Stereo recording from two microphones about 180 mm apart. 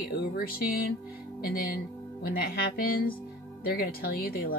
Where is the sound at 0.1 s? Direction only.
55° left (ahead or behind).